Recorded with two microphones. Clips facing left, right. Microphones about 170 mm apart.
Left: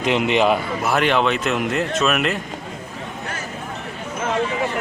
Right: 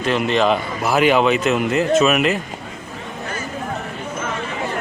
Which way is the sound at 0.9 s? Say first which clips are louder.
Right 4 dB; 5° right (ahead or behind).